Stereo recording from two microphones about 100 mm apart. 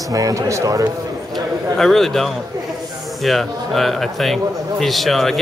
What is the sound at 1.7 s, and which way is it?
Speech, centre (ahead or behind).